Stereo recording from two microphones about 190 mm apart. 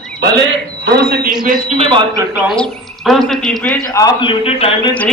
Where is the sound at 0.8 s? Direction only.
55° right (ahead or behind).